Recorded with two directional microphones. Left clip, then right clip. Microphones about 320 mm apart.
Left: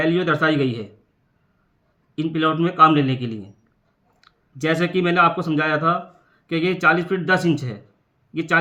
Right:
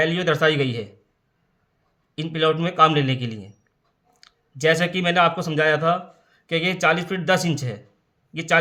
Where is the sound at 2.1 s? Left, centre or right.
Right.